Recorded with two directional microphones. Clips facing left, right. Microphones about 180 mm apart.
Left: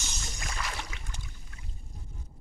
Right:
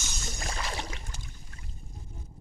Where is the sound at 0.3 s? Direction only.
35° right (ahead or behind).